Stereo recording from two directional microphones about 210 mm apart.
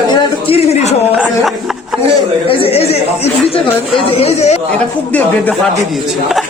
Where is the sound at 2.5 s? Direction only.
25° left (ahead or behind).